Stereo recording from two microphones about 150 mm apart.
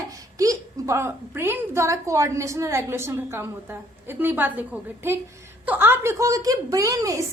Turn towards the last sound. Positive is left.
turn(degrees=-25)  # may be behind; listen again after turning